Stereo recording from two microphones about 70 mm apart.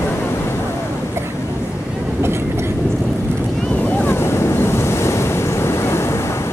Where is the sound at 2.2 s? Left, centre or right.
Right.